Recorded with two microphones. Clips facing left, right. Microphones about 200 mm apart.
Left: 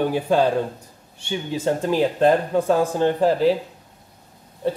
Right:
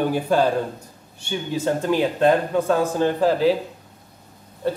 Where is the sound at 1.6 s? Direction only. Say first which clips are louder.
Left 1 dB; 25° left (ahead or behind).